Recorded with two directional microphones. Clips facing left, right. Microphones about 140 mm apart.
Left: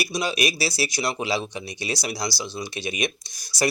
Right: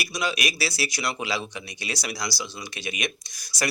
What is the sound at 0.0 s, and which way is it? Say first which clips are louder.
Speech: left 3 dB; 30° left (ahead or behind).